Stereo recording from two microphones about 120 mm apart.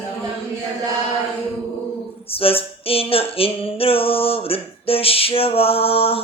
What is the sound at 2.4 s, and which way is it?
Female singing, 50° left (ahead or behind).